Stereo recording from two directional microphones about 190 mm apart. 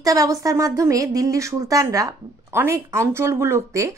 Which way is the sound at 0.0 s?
20° right (ahead or behind).